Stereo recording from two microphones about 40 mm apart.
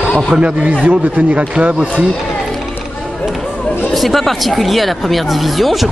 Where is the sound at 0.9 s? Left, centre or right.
Right.